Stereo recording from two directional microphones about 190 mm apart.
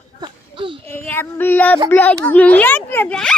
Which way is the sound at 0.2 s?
25° right (ahead or behind).